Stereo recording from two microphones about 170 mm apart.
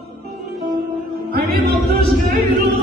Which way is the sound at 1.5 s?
70° right (ahead or behind).